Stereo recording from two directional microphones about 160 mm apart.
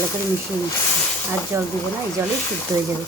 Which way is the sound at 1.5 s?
15° right (ahead or behind).